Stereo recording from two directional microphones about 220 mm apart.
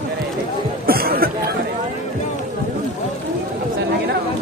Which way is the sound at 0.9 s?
45° right (ahead or behind).